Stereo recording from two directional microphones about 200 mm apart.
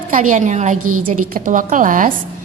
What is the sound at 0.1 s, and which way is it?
A woman's voice, 40° right (ahead or behind).